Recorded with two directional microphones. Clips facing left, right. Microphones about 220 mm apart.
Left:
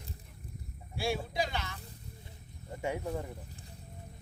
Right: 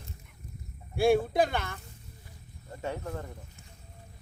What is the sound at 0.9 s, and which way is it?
Speech, 55° right (ahead or behind).